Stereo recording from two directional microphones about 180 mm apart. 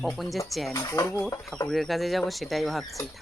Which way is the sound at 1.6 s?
Centre (ahead or behind).